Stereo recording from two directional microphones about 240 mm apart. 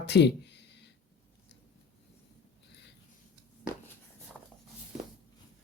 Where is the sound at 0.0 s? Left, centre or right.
Left.